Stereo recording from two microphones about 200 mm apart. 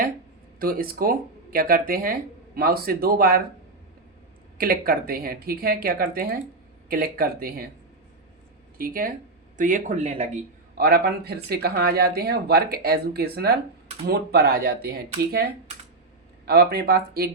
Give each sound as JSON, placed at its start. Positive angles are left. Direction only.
{"t": 0.6, "sound": "speech", "side_deg": -45}
{"t": 4.5, "sound": "speech", "side_deg": -45}
{"t": 8.8, "sound": "speech", "side_deg": -45}
{"t": 10.8, "sound": "speech", "side_deg": -50}
{"t": 16.5, "sound": "speech", "side_deg": -50}